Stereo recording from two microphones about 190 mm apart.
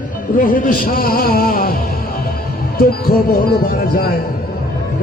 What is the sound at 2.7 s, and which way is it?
Speech, 50° left (ahead or behind).